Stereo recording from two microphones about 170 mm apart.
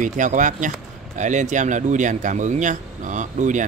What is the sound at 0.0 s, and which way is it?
Speech, 45° right (ahead or behind).